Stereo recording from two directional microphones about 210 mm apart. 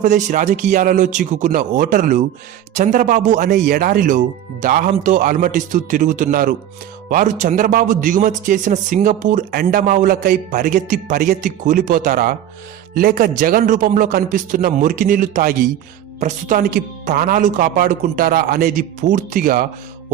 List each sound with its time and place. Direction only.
0.0 s speech: 40° right (ahead or behind)